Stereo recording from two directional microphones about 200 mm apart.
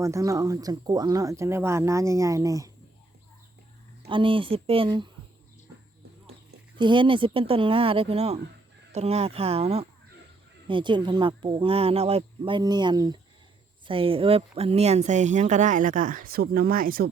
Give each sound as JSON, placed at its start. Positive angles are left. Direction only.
{"t": 0.0, "sound": "speech", "side_deg": -15}
{"t": 4.0, "sound": "speech", "side_deg": -25}
{"t": 6.7, "sound": "speech", "side_deg": -25}